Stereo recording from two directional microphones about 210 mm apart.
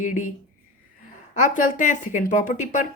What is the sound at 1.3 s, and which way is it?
A woman's voice, 35° left (ahead or behind).